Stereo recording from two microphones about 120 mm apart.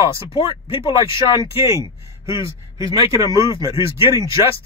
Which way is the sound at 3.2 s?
35° left (ahead or behind).